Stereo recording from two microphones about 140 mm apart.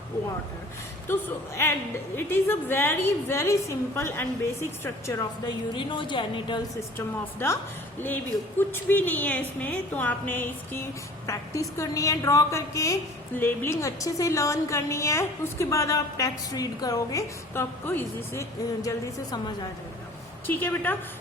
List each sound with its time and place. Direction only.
1.0 s a woman's voice: 20° left (ahead or behind)
5.5 s a woman's voice: 35° left (ahead or behind)
6.7 s a woman's voice: 20° left (ahead or behind)
20.5 s a woman's voice: 15° left (ahead or behind)